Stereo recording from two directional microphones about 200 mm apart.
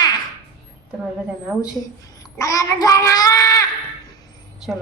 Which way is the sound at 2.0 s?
15° left (ahead or behind).